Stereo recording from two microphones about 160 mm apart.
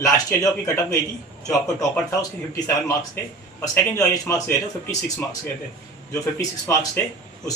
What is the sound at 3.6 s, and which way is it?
Speech, 10° left (ahead or behind).